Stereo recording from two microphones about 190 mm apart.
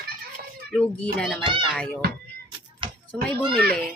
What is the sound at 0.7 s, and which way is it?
Speech, 5° left (ahead or behind).